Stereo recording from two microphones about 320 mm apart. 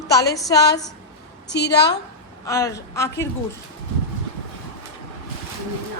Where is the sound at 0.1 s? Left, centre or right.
Centre.